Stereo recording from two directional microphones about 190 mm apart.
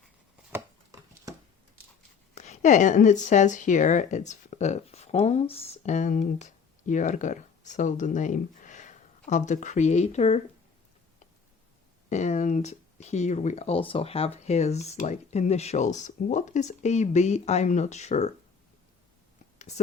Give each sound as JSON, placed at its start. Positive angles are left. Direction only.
{"t": 0.5, "sound": "chopping", "side_deg": -20}
{"t": 2.3, "sound": "speech", "side_deg": 40}
{"t": 12.0, "sound": "speech", "side_deg": 35}
{"t": 19.5, "sound": "whispering", "side_deg": 35}